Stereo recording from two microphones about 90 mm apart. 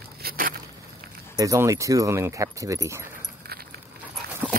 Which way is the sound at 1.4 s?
35° right (ahead or behind).